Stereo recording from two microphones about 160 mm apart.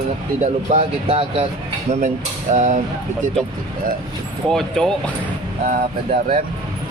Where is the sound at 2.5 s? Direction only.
50° right (ahead or behind).